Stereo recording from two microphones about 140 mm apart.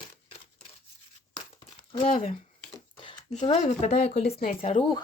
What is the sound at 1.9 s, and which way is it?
Speech, 40° left (ahead or behind).